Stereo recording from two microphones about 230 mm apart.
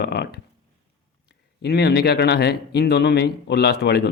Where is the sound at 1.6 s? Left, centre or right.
Left.